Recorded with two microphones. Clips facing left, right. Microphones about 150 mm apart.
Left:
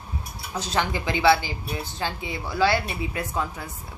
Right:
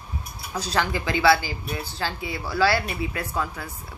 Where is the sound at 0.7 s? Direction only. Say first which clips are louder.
Right 1 dB; 20° left (ahead or behind).